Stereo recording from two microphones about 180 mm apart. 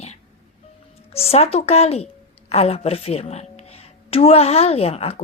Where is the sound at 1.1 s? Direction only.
35° left (ahead or behind).